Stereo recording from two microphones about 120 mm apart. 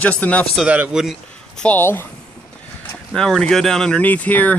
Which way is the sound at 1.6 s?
15° left (ahead or behind).